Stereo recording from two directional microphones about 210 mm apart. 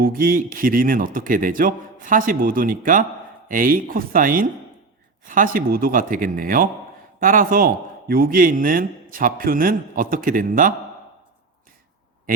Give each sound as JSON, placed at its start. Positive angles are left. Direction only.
{"t": 0.0, "sound": "a man's voice", "side_deg": -45}